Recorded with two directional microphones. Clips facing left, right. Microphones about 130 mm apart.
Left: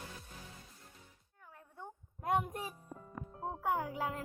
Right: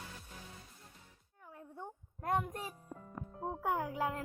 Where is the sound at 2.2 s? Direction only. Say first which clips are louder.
Left 1 dB; 15° left (ahead or behind).